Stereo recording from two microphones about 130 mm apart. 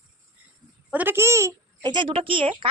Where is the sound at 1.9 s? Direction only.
40° right (ahead or behind).